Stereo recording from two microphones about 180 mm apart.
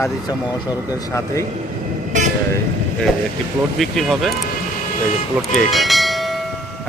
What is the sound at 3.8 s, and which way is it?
Speech, centre (ahead or behind).